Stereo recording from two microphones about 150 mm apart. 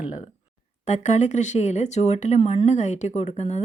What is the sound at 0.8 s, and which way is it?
Speech, 50° left (ahead or behind).